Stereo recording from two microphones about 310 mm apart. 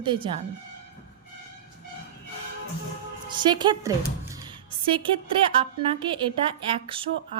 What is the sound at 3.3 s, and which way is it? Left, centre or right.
A woman's voice, centre.